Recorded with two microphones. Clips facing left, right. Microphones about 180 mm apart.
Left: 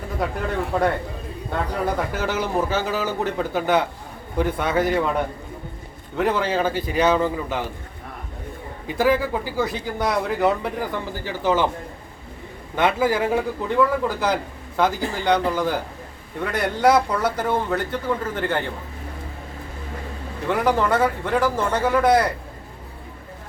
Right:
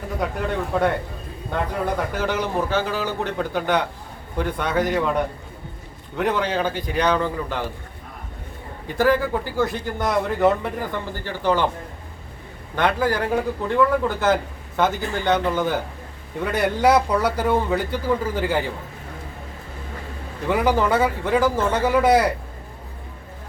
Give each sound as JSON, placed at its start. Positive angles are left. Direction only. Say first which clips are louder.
{"t": 0.2, "sound": "a man's voice", "louder": "left 1 dB", "side_deg": 0}
{"t": 2.1, "sound": "a man's voice", "louder": "even", "side_deg": 5}
{"t": 8.9, "sound": "a man's voice", "louder": "right 1 dB", "side_deg": 5}
{"t": 12.7, "sound": "a man's voice", "louder": "left 1 dB", "side_deg": 5}
{"t": 20.5, "sound": "a man's voice", "louder": "right 1 dB", "side_deg": -5}